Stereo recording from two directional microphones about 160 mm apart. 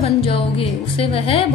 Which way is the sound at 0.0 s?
35° left (ahead or behind).